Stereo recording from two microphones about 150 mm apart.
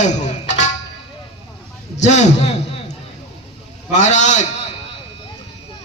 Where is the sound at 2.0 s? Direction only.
50° left (ahead or behind).